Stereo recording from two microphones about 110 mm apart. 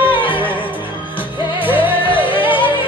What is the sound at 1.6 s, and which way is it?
Music, 15° right (ahead or behind).